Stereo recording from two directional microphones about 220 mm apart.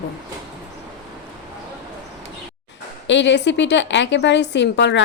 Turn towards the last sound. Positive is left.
turn(degrees=55)  # may be behind; listen again after turning